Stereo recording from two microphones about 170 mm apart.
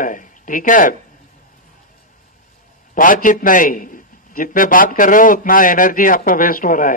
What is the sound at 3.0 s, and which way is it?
A man's voice, 55° left (ahead or behind).